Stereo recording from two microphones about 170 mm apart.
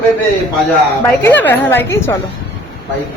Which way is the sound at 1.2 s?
10° left (ahead or behind).